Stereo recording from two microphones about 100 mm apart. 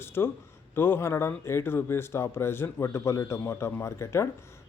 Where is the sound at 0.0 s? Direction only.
25° left (ahead or behind).